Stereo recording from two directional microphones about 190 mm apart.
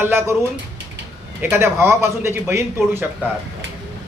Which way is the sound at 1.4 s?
10° right (ahead or behind).